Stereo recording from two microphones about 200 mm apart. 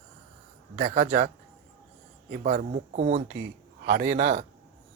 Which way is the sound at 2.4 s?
35° right (ahead or behind).